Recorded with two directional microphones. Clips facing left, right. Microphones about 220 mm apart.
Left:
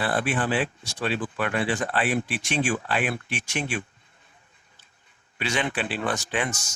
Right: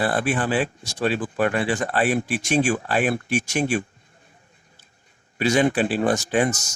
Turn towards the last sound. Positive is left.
turn(degrees=-40)  # may be behind; listen again after turning